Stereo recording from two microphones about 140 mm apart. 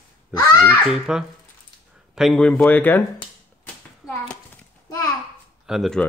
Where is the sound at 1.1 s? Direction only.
5° right (ahead or behind); by 3.0 s 15° left (ahead or behind).